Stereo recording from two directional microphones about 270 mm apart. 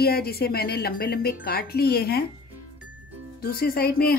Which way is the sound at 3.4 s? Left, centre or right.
Left.